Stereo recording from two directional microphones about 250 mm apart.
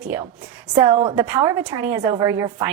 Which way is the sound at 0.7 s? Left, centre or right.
Centre.